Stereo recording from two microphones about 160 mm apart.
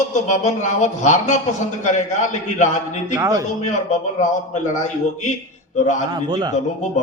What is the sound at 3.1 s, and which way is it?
Speech, 20° right (ahead or behind).